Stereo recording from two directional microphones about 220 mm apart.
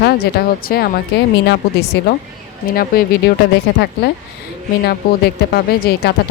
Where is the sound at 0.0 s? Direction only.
45° left (ahead or behind).